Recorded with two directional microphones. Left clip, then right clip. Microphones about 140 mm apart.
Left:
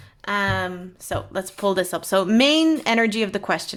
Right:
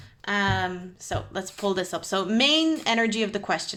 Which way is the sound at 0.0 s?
30° left (ahead or behind).